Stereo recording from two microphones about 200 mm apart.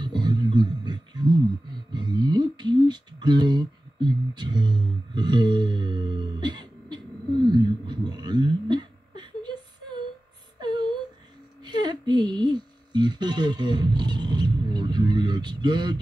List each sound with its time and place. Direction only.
0.0 s a sound: 20° right (ahead or behind)
1.7 s music: 20° right (ahead or behind)
7.4 s whimper: 20° right (ahead or behind)
10.6 s whimper: 20° right (ahead or behind)
11.6 s music: 20° right (ahead or behind)